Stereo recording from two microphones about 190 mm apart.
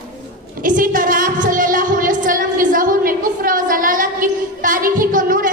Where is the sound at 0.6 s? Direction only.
45° right (ahead or behind).